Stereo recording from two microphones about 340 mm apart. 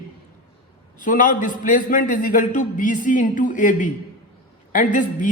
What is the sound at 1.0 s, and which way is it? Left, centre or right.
A man's voice, left.